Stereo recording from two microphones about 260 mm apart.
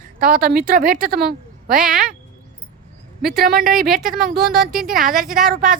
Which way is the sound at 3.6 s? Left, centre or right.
Centre.